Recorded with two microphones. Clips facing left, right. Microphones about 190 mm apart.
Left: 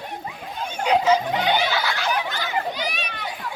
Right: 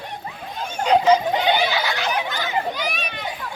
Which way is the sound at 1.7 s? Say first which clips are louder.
Right 1 dB; 20° right (ahead or behind).